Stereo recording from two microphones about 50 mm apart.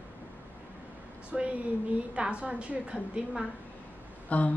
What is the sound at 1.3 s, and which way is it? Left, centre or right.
A woman's voice, right.